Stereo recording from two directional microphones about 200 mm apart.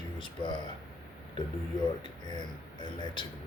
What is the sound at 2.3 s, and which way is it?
Speech, 20° left (ahead or behind).